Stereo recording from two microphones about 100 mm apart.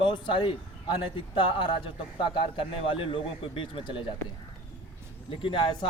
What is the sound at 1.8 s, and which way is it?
A man's voice, 60° left (ahead or behind).